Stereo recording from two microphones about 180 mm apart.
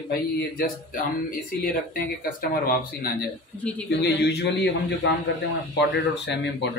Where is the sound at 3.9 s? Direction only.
70° left (ahead or behind).